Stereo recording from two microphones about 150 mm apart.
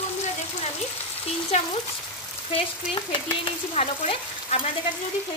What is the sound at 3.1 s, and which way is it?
Chopping, 35° left (ahead or behind).